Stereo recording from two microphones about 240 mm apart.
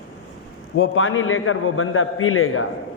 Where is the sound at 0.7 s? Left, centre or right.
Left.